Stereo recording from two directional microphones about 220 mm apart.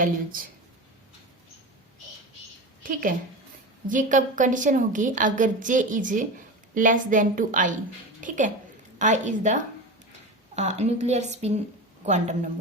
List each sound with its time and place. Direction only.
0.0 s a woman's voice: 40° right (ahead or behind)
2.8 s a woman's voice: 40° right (ahead or behind)
9.0 s a woman's voice: 35° right (ahead or behind)